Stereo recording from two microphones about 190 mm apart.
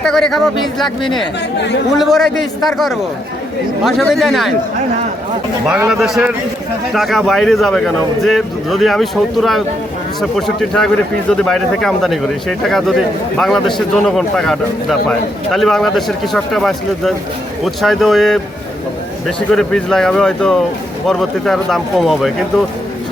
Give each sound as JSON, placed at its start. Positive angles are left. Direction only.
{"t": 0.0, "sound": "a man's voice", "side_deg": 0}
{"t": 1.5, "sound": "speech", "side_deg": 65}
{"t": 2.0, "sound": "a man's voice", "side_deg": 0}
{"t": 5.6, "sound": "a man's voice", "side_deg": -5}
{"t": 19.5, "sound": "a man's voice", "side_deg": 5}